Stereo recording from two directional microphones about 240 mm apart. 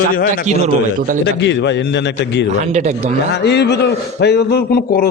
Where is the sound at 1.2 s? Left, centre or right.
Left.